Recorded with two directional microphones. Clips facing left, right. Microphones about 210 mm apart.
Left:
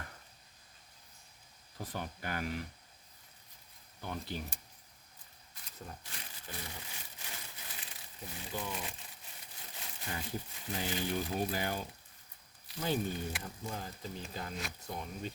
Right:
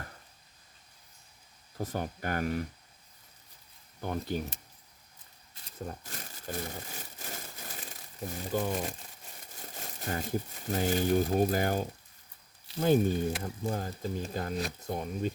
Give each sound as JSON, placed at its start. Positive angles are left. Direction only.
{"t": 1.8, "sound": "speech", "side_deg": -45}
{"t": 4.0, "sound": "speech", "side_deg": -50}
{"t": 5.9, "sound": "crumpling", "side_deg": -45}
{"t": 12.8, "sound": "speech", "side_deg": -45}